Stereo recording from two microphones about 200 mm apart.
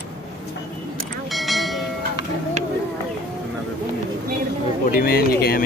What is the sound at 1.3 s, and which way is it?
Vehicle, centre (ahead or behind).